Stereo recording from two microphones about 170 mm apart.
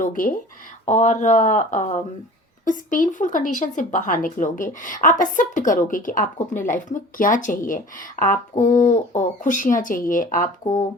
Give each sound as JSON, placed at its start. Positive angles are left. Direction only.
{"t": 0.0, "sound": "speech", "side_deg": 55}